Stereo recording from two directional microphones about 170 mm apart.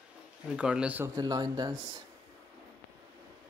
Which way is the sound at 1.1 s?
25° right (ahead or behind).